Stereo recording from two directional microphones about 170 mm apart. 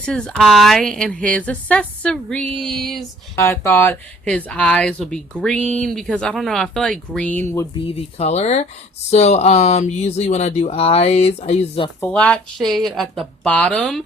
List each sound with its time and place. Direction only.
0.0 s a woman's voice: 5° left (ahead or behind)
3.3 s a woman's voice: 15° left (ahead or behind)
7.9 s speech: 40° left (ahead or behind)
11.9 s a woman's voice: 10° left (ahead or behind)